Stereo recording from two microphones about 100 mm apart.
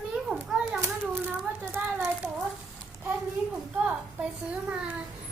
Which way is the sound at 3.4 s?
15° right (ahead or behind).